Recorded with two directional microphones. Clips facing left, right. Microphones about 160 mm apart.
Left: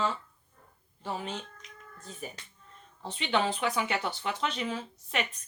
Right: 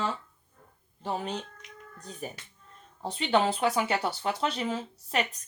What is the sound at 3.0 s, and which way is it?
Speech, 40° right (ahead or behind).